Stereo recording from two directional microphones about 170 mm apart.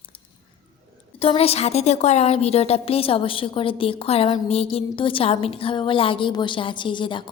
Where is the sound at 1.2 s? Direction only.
35° left (ahead or behind).